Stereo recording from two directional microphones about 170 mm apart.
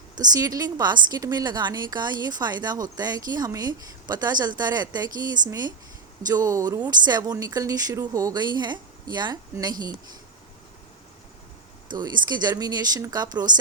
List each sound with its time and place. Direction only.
0.2 s a woman's voice: 20° right (ahead or behind)
11.9 s a woman's voice: 25° right (ahead or behind)